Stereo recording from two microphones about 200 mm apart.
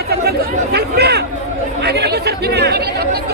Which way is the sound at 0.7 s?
55° right (ahead or behind).